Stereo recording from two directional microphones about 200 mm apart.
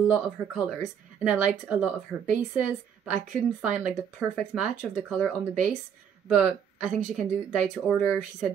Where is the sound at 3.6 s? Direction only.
35° right (ahead or behind).